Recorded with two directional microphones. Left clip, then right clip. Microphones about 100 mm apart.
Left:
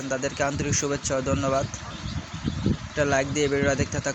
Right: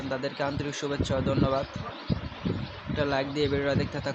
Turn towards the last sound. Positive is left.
turn(degrees=30)  # may be behind; listen again after turning